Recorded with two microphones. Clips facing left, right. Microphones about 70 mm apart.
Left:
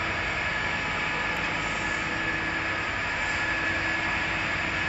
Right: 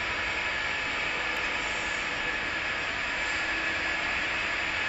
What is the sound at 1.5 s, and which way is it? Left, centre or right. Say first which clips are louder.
Vehicle: left 2 dB; centre.